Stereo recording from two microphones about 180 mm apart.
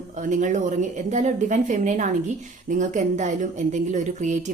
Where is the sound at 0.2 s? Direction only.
45° right (ahead or behind).